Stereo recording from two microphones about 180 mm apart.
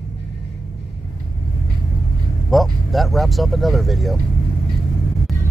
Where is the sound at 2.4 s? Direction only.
Centre (ahead or behind).